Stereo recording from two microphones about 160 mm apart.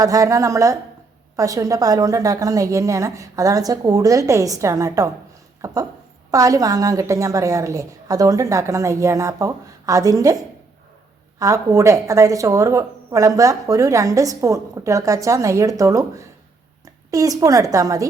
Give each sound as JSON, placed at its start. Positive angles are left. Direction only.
{"t": 0.0, "sound": "a woman's voice", "side_deg": -20}